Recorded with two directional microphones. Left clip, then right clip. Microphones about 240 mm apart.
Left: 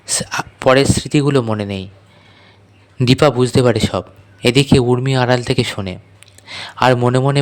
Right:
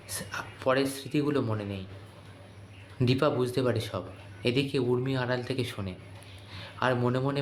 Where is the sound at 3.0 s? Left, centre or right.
Left.